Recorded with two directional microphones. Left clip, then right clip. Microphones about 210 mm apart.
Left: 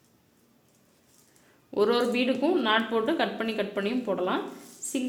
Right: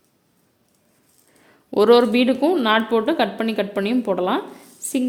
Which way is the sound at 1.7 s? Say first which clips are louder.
Right 10 dB; 45° right (ahead or behind).